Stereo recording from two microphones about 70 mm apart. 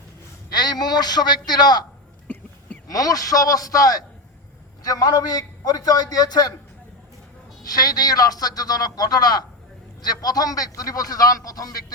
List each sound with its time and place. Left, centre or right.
0.5 s a man's voice: left
2.2 s a sound: centre
2.8 s a man's voice: left
7.6 s a man's voice: left